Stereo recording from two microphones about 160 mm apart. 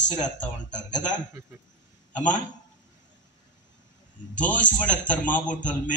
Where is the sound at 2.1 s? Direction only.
50° left (ahead or behind).